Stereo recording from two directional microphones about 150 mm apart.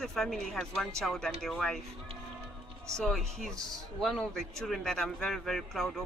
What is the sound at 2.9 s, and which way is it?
A man's voice, centre (ahead or behind).